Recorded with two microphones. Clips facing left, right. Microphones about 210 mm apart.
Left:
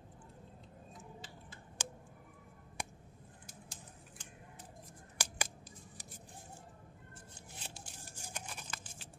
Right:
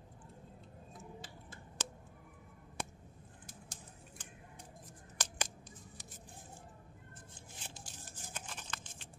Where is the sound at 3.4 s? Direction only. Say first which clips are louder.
Right 1 dB; 50° right (ahead or behind).